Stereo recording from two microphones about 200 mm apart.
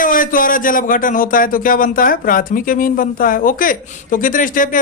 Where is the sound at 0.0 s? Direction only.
45° left (ahead or behind).